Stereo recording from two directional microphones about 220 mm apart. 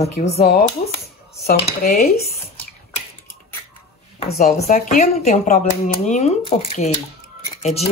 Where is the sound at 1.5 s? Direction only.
40° left (ahead or behind).